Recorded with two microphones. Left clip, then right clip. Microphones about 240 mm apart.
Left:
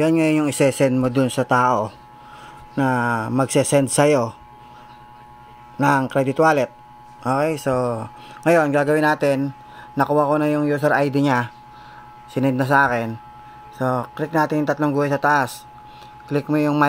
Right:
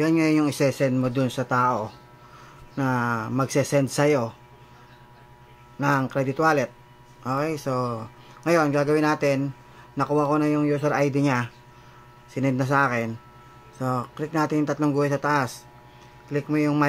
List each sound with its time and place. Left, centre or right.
0.0 s speech: centre
5.8 s speech: centre